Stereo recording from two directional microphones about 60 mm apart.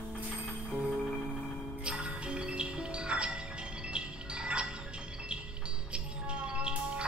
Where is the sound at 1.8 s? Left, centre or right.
Centre.